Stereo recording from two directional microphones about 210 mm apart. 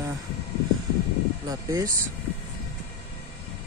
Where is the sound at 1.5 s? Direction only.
15° right (ahead or behind).